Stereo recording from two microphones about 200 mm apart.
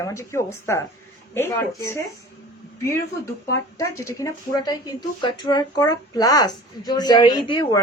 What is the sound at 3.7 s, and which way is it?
A woman's voice, 15° left (ahead or behind).